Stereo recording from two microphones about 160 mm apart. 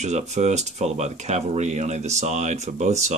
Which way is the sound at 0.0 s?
45° right (ahead or behind).